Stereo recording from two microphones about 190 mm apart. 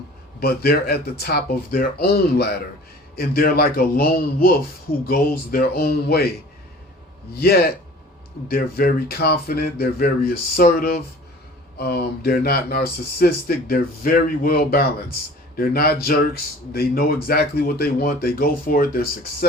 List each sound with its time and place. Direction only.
0.3 s speech: 55° left (ahead or behind)
7.3 s speech: 55° left (ahead or behind)